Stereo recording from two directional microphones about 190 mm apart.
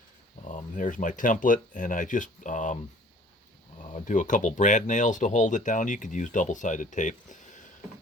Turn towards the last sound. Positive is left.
turn(degrees=40)  # may be behind; listen again after turning